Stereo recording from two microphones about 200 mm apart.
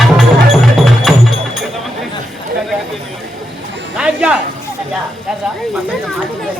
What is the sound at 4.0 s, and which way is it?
Speech, 5° right (ahead or behind).